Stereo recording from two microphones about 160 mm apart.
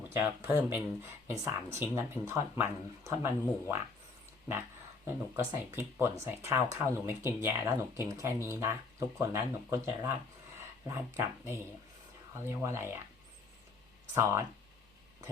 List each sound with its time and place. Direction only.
0.1 s speech: 15° right (ahead or behind)
5.0 s speech: 15° right (ahead or behind)
14.1 s speech: 20° right (ahead or behind)